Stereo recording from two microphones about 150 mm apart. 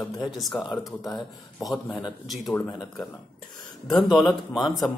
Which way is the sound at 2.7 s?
25° left (ahead or behind).